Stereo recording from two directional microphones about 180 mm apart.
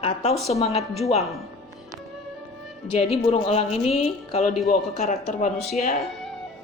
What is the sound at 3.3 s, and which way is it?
Speech, 35° left (ahead or behind).